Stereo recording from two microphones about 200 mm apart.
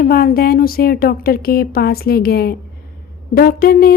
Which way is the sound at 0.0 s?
45° left (ahead or behind).